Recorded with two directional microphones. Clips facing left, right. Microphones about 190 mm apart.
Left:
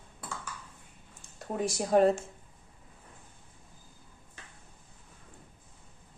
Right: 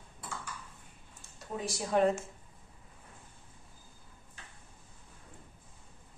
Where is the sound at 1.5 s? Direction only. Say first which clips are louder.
Left 5 dB; 45° left (ahead or behind).